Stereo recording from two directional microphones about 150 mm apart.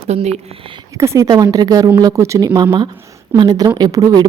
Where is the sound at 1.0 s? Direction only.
25° right (ahead or behind).